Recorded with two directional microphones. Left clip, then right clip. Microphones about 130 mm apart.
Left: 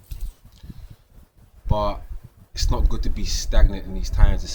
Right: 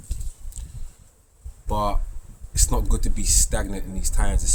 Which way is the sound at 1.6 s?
25° right (ahead or behind).